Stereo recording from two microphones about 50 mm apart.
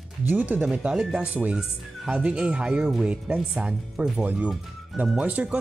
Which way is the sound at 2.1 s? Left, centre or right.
Right.